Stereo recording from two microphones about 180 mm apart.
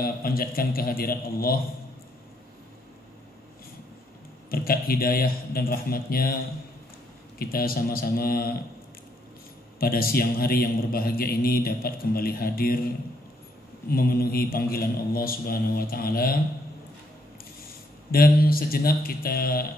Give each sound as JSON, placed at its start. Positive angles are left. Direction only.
{"t": 0.0, "sound": "a man's voice", "side_deg": 55}
{"t": 4.5, "sound": "a man's voice", "side_deg": 55}
{"t": 7.3, "sound": "a man's voice", "side_deg": 55}
{"t": 9.8, "sound": "a man's voice", "side_deg": 55}
{"t": 18.1, "sound": "a man's voice", "side_deg": 55}